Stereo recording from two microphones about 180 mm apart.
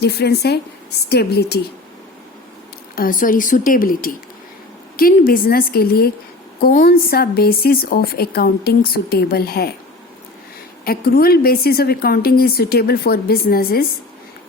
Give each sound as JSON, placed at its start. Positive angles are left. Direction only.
{"t": 0.0, "sound": "speech", "side_deg": 65}
{"t": 2.9, "sound": "speech", "side_deg": 50}
{"t": 10.8, "sound": "speech", "side_deg": 55}